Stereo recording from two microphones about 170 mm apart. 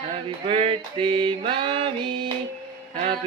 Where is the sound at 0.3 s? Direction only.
35° right (ahead or behind).